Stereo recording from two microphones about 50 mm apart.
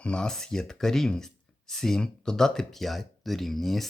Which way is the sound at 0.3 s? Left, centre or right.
Centre.